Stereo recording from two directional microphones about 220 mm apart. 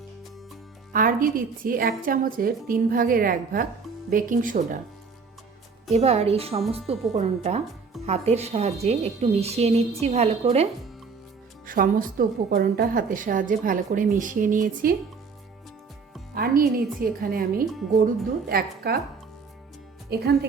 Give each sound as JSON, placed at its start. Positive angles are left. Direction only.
{"t": 0.9, "sound": "a woman's voice", "side_deg": -40}
{"t": 5.9, "sound": "a woman's voice", "side_deg": -30}
{"t": 11.6, "sound": "a woman's voice", "side_deg": -40}
{"t": 16.3, "sound": "a woman's voice", "side_deg": -45}
{"t": 20.1, "sound": "a woman's voice", "side_deg": -45}